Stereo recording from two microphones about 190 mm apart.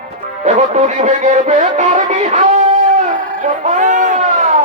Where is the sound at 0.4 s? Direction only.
35° right (ahead or behind).